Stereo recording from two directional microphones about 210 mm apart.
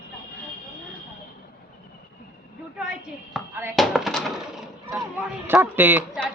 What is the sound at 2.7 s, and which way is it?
Speech, 5° right (ahead or behind).